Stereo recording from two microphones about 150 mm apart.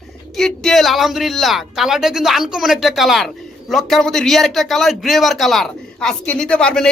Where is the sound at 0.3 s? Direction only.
5° left (ahead or behind).